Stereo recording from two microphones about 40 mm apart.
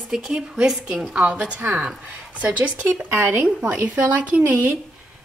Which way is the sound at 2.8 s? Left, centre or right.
Right.